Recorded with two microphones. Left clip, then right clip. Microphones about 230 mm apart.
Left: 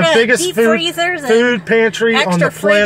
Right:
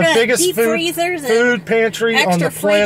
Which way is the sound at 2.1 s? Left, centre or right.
Right.